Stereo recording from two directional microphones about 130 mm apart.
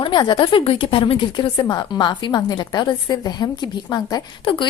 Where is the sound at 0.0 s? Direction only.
35° left (ahead or behind).